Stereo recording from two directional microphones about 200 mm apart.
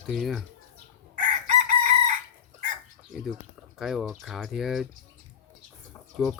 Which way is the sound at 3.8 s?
Centre (ahead or behind).